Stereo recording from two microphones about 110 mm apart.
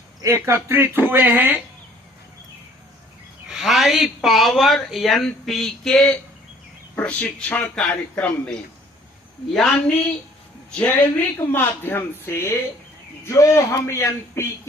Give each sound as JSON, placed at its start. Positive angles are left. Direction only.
{"t": 0.2, "sound": "speech", "side_deg": -25}
{"t": 3.5, "sound": "a sound", "side_deg": 0}
{"t": 3.8, "sound": "speech", "side_deg": -5}
{"t": 9.6, "sound": "speech", "side_deg": 5}